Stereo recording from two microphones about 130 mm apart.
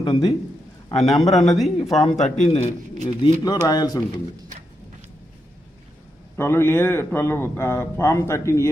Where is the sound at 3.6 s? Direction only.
30° left (ahead or behind).